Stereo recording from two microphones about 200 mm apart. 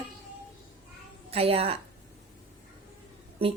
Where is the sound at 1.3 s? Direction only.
30° right (ahead or behind).